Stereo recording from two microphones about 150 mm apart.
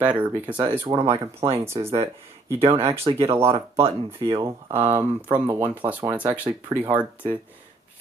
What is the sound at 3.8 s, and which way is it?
Speech, 40° right (ahead or behind).